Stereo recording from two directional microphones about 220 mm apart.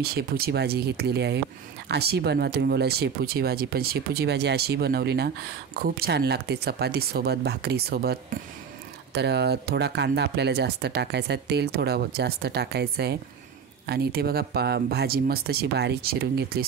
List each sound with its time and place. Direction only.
0.0 s speech: 45° right (ahead or behind)